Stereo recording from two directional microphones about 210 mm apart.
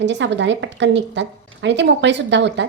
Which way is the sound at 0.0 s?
55° right (ahead or behind).